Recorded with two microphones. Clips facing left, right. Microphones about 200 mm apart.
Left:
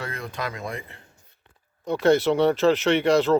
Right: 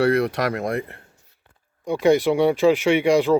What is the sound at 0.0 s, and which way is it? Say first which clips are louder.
Speech: right 13 dB; 75° right (ahead or behind).